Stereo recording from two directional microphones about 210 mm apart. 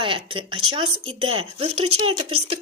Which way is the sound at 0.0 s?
25° right (ahead or behind).